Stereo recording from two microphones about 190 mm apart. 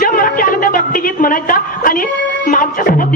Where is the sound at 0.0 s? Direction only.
50° left (ahead or behind).